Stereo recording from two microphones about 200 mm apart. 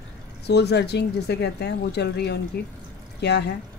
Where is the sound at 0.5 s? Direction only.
55° left (ahead or behind).